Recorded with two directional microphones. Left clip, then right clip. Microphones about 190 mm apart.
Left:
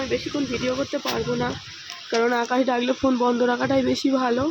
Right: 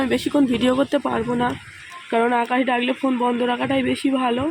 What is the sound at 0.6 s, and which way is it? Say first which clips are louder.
Speech: right 5 dB; 40° right (ahead or behind).